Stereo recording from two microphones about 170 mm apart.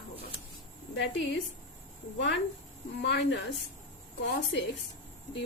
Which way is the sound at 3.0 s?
90° left.